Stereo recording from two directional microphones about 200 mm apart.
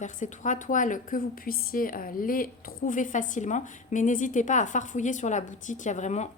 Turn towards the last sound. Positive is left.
turn(degrees=35)  # may be behind; listen again after turning